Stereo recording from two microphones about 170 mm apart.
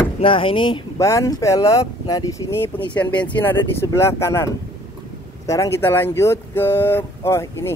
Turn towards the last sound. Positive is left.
turn(degrees=15)  # may be behind; listen again after turning